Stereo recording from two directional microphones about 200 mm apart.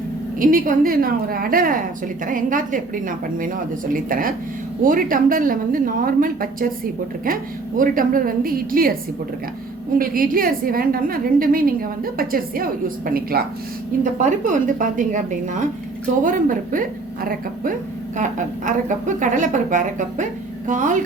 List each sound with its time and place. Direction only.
0.3 s a woman's voice: 45° right (ahead or behind)
7.8 s a woman's voice: 45° right (ahead or behind)
10.0 s a woman's voice: 45° right (ahead or behind)